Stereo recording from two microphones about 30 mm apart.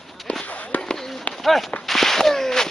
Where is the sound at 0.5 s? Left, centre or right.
Left.